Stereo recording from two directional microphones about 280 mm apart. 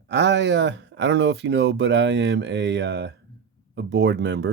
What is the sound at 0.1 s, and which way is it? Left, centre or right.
Speech, right.